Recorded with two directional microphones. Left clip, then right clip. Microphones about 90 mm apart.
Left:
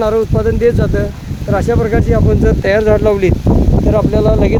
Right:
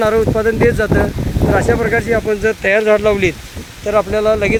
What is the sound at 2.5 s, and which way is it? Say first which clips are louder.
Speech: even; 60° left (ahead or behind).